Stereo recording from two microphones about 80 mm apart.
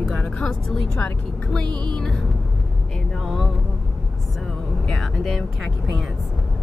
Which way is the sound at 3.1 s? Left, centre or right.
Centre.